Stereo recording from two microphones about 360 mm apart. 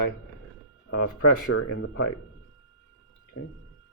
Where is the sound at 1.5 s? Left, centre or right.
Left.